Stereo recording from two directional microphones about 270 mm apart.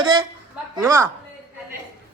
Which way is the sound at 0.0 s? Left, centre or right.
Centre.